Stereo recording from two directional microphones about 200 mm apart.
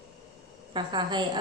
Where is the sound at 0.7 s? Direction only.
20° right (ahead or behind).